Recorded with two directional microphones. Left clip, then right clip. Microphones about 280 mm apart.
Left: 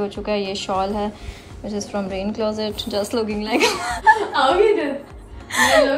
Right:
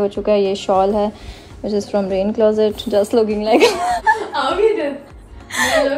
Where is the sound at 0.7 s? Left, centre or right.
Right.